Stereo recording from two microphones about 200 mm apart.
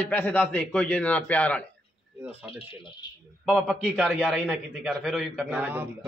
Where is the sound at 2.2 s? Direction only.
10° right (ahead or behind).